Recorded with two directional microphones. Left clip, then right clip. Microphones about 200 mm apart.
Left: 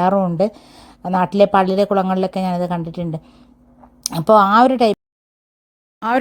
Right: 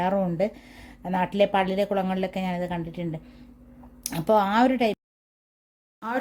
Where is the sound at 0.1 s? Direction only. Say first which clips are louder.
Left 8 dB; 30° left (ahead or behind).